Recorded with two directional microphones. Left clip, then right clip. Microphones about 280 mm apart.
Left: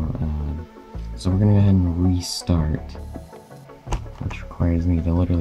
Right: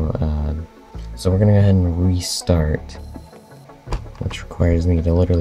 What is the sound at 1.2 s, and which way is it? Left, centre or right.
Speech, centre.